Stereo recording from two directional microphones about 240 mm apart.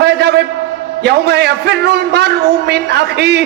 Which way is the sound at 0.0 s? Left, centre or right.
Right.